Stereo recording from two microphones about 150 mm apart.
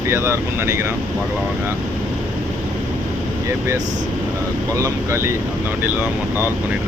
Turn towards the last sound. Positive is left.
turn(degrees=-20)  # may be behind; listen again after turning